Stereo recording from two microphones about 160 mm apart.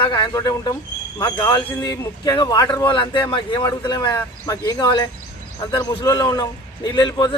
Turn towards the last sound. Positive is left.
turn(degrees=25)  # may be behind; listen again after turning